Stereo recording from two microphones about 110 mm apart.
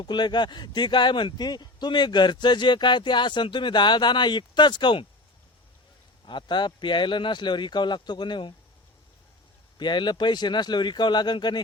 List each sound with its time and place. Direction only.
0.0 s speech: 40° left (ahead or behind)
6.2 s speech: 45° left (ahead or behind)
9.7 s speech: 45° left (ahead or behind)